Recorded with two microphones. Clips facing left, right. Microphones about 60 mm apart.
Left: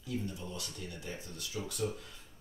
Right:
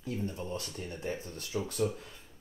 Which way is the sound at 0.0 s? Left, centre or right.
Right.